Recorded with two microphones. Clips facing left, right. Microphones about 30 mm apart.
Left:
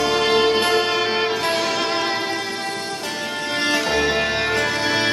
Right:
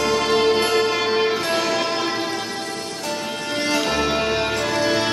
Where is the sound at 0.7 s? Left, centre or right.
Centre.